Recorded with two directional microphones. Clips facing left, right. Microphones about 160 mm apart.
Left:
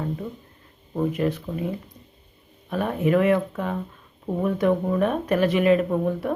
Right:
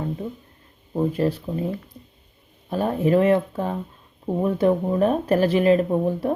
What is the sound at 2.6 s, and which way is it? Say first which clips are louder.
Speech: right 2 dB; 30° right (ahead or behind).